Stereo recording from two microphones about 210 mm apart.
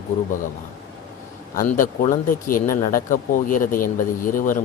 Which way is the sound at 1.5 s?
40° left (ahead or behind).